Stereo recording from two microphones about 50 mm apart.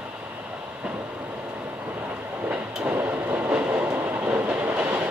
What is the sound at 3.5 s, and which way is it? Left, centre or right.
Train, right.